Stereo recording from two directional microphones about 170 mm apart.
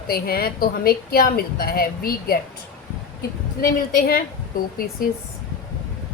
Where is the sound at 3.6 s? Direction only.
60° left (ahead or behind).